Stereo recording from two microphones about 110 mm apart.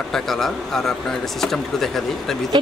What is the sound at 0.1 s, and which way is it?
Speech, 5° left (ahead or behind).